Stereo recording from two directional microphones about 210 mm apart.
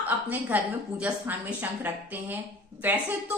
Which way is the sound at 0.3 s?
10° right (ahead or behind).